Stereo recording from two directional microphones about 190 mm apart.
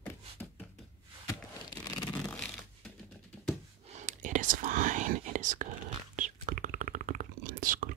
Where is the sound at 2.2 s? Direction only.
5° left (ahead or behind).